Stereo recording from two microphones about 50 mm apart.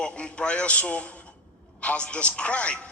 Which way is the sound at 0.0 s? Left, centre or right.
Left.